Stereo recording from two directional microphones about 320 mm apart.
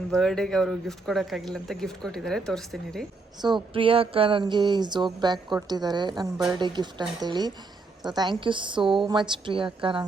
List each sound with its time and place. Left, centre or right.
0.1 s speech: centre
3.4 s speech: centre